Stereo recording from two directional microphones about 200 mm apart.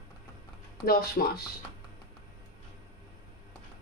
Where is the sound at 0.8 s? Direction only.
50° left (ahead or behind).